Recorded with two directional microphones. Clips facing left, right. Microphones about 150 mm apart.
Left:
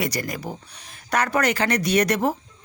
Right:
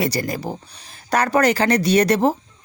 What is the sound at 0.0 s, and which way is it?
A woman's voice, 30° right (ahead or behind).